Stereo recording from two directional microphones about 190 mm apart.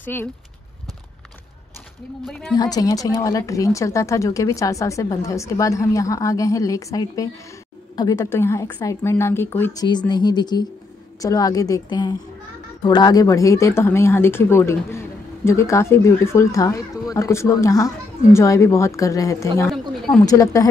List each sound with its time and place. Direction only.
0.0 s speech: 10° left (ahead or behind)
2.2 s speech: centre (ahead or behind)
2.5 s speech: 20° left (ahead or behind)
9.8 s a woman's voice: 25° left (ahead or behind)
19.7 s speech: centre (ahead or behind)
20.2 s speech: 20° left (ahead or behind)